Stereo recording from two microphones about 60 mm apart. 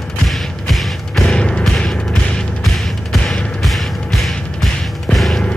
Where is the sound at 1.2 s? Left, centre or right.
Centre.